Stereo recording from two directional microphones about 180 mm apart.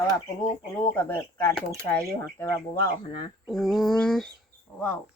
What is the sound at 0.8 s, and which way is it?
Speech, 10° left (ahead or behind).